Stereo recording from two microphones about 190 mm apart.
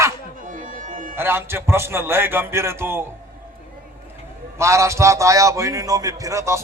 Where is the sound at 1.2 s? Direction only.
10° right (ahead or behind).